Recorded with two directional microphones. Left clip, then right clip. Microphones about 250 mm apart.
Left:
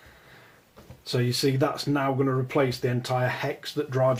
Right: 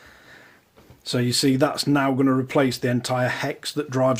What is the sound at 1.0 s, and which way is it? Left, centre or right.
Speech, right.